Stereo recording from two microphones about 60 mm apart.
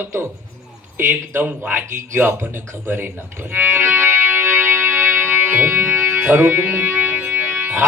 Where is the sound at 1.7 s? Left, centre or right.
Right.